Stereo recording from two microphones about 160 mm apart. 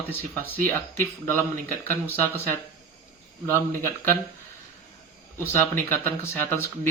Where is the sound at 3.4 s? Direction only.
15° left (ahead or behind).